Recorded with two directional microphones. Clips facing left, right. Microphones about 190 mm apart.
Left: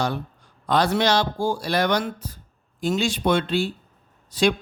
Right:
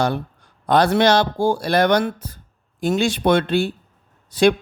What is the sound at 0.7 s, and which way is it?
Speech, 55° right (ahead or behind).